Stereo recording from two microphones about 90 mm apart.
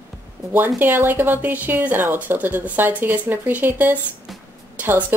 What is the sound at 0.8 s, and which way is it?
A woman's voice, 25° right (ahead or behind).